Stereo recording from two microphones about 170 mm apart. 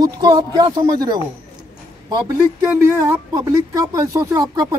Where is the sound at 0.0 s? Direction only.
25° right (ahead or behind).